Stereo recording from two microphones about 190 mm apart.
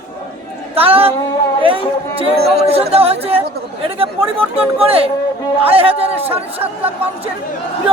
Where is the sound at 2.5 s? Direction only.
35° right (ahead or behind).